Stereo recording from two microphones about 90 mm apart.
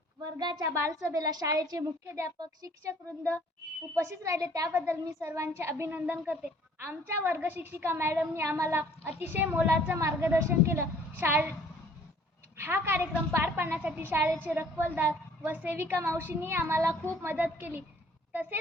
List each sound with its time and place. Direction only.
0.3 s a woman's voice: 55° right (ahead or behind)
0.6 s a woman's voice: 35° right (ahead or behind)
2.4 s a woman's voice: 45° right (ahead or behind)
3.9 s a child's voice: 30° right (ahead or behind)
10.0 s a child's voice: 35° right (ahead or behind)
12.5 s a woman's voice: 25° right (ahead or behind)